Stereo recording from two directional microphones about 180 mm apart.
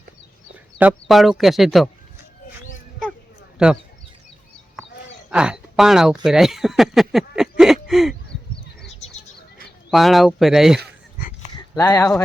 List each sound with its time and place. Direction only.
0.8 s speech: 5° right (ahead or behind)
5.3 s a sound: 5° right (ahead or behind)
9.9 s speech: centre (ahead or behind)
11.8 s speech: 20° left (ahead or behind)